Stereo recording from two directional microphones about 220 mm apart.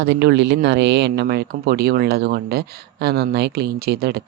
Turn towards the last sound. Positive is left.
turn(degrees=-45)  # may be behind; listen again after turning